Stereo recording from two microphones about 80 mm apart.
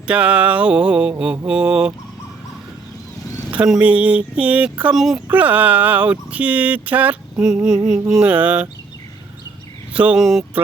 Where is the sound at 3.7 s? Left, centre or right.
Centre.